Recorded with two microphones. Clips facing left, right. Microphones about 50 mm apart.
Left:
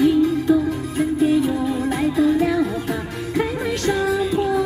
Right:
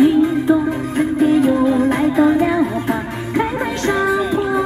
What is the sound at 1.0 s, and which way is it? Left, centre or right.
Music, right.